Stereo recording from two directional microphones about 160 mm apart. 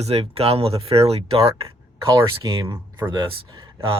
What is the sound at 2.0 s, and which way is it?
Speech, 20° right (ahead or behind).